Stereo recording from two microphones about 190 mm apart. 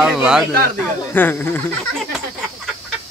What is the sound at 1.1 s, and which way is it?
Speech, 10° left (ahead or behind).